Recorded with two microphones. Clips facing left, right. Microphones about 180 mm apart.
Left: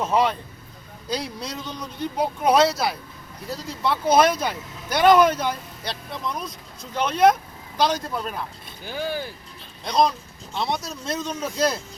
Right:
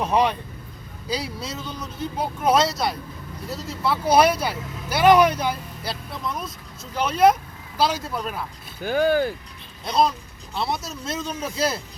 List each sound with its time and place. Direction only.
0.0 s speech: 15° right (ahead or behind)
8.8 s speech: 55° right (ahead or behind)
9.8 s speech: 5° right (ahead or behind)